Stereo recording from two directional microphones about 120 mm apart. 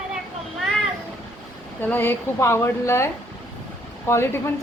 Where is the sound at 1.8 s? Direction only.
15° left (ahead or behind).